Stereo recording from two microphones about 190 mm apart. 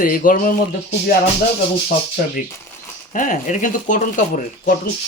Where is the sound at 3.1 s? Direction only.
45° left (ahead or behind).